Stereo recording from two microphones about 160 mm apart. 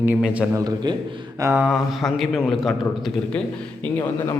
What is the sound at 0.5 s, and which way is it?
Speech, 25° right (ahead or behind).